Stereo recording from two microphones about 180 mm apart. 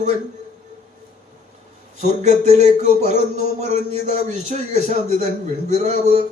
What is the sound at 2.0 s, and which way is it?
Speech, 40° right (ahead or behind).